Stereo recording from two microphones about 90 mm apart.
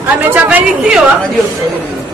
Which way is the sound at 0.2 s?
20° right (ahead or behind).